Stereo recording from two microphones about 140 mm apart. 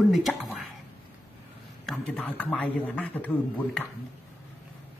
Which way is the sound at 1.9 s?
10° left (ahead or behind).